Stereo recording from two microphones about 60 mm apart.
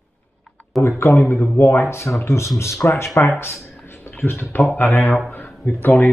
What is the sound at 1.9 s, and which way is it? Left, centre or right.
Speech, left.